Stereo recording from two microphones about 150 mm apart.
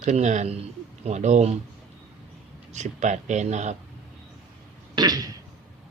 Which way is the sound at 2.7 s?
50° right (ahead or behind).